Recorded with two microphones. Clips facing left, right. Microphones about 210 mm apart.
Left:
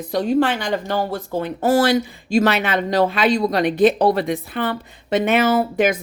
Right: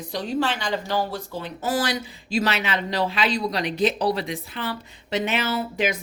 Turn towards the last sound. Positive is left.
turn(degrees=50)  # may be behind; listen again after turning